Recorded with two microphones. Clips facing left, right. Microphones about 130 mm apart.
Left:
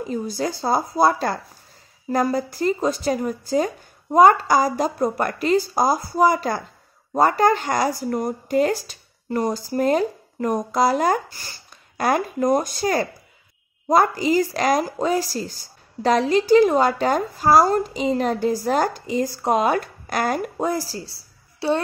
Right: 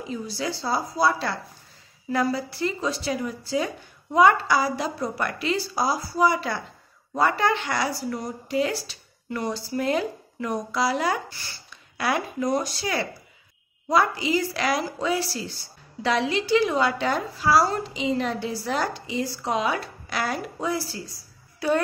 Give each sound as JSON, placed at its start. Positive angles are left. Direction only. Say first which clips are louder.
{"t": 0.0, "sound": "speech", "louder": "left 5 dB", "side_deg": 45}